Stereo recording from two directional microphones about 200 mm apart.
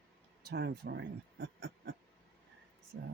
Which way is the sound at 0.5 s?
55° right (ahead or behind).